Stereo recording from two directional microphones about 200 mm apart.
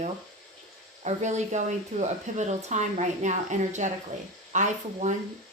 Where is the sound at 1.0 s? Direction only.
35° right (ahead or behind).